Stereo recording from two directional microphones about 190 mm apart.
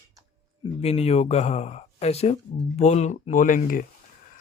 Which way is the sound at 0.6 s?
30° left (ahead or behind).